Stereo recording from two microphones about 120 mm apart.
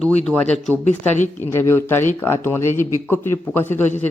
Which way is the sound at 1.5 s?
20° left (ahead or behind).